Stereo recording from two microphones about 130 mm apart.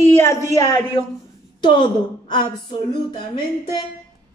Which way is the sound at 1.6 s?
35° left (ahead or behind).